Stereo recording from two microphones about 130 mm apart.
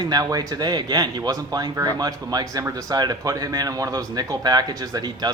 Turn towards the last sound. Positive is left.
turn(degrees=-30)  # may be behind; listen again after turning